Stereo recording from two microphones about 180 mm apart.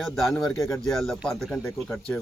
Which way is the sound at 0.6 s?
15° left (ahead or behind).